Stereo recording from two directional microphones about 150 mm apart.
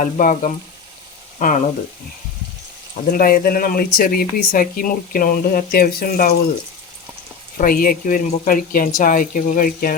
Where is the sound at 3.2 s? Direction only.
75° left (ahead or behind).